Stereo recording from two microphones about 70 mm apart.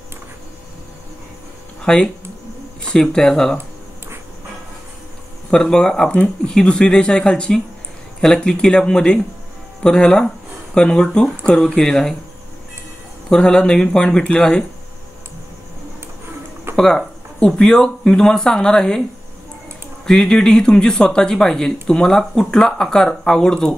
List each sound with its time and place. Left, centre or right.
1.8 s speech: centre
5.5 s speech: centre
13.3 s speech: centre
16.7 s speech: centre
20.1 s speech: centre